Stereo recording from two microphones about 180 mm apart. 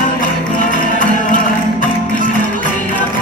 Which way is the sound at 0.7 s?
45° left (ahead or behind).